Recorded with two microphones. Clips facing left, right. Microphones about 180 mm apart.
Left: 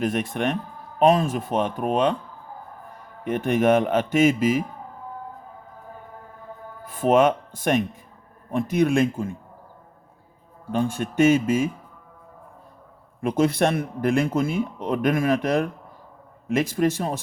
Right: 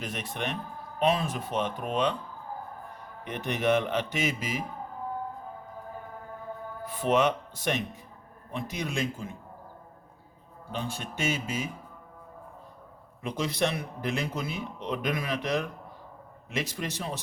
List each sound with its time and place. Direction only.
0.0 s speech: 50° left (ahead or behind)
3.2 s speech: 50° left (ahead or behind)
6.8 s speech: 50° left (ahead or behind)
10.7 s speech: 50° left (ahead or behind)
13.2 s speech: 50° left (ahead or behind)